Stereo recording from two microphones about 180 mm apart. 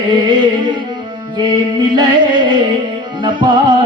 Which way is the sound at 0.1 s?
25° right (ahead or behind).